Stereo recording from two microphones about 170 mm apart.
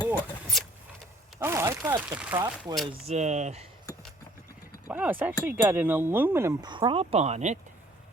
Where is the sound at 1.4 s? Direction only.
15° right (ahead or behind).